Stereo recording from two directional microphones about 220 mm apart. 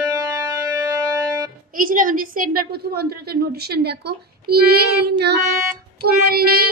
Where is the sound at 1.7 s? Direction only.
40° right (ahead or behind).